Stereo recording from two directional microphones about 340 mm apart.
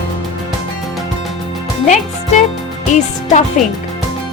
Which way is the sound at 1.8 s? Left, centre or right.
Left.